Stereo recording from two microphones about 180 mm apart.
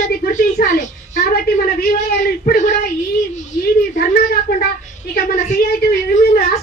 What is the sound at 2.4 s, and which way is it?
Child singing, 60° left (ahead or behind).